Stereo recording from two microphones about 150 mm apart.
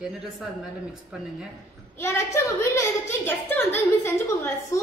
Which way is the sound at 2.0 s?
20° left (ahead or behind).